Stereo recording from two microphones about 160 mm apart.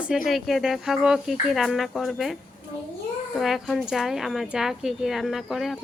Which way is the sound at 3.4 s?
Centre (ahead or behind).